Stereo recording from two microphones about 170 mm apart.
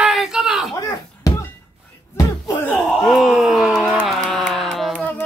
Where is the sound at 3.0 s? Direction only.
Centre (ahead or behind).